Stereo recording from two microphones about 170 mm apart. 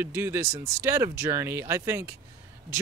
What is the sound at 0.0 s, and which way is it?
Speech, 15° right (ahead or behind).